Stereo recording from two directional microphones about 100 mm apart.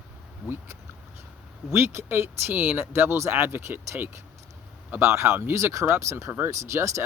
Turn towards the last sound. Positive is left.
turn(degrees=-30)  # may be behind; listen again after turning